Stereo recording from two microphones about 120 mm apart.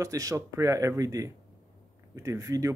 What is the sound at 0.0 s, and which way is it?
Speech, 30° right (ahead or behind).